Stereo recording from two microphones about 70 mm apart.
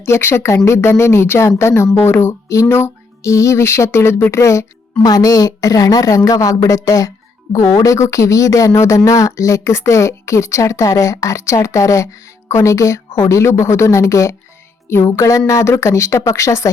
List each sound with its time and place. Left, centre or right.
0.0 s a woman's voice: left
5.0 s a woman's voice: left
14.8 s speech: left
15.6 s speech: left